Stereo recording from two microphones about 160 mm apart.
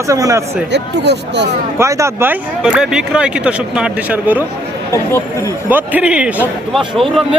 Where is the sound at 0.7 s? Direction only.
90° right.